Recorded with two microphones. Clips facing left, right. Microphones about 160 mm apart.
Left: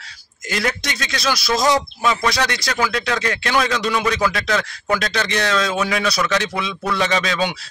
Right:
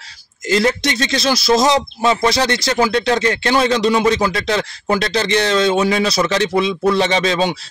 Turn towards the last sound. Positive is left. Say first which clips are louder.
# right 4 dB
turn(degrees=-30)  # may be behind; listen again after turning